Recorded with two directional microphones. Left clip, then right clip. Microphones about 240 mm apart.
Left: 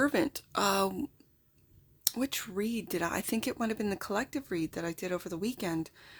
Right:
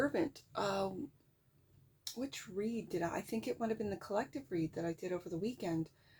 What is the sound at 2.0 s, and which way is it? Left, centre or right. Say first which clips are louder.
Speech: left 10 dB; left.